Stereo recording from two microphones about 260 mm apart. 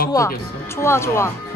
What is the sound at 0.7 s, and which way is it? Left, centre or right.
Speech, centre.